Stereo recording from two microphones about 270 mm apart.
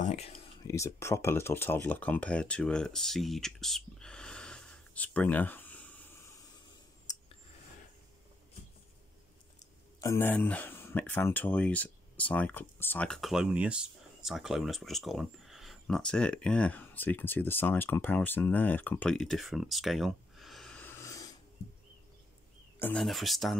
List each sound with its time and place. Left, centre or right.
0.0 s a sound: left
0.7 s speech: centre
9.9 s speech: centre
22.8 s speech: centre